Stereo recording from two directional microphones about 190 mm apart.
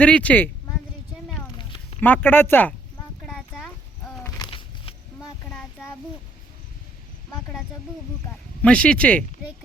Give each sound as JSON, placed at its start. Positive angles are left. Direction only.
{"t": 0.0, "sound": "speech", "side_deg": 5}
{"t": 1.5, "sound": "a sound", "side_deg": 25}
{"t": 2.0, "sound": "speech", "side_deg": 10}
{"t": 3.5, "sound": "horse", "side_deg": 5}
{"t": 4.4, "sound": "a sound", "side_deg": 30}
{"t": 8.6, "sound": "speech", "side_deg": 5}